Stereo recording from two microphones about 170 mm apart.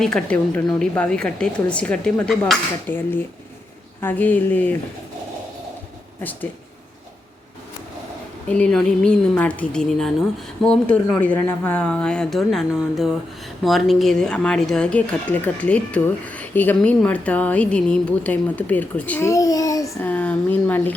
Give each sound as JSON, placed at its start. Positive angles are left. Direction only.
{"t": 0.0, "sound": "a woman's voice", "side_deg": 5}
{"t": 8.4, "sound": "a woman's voice", "side_deg": 5}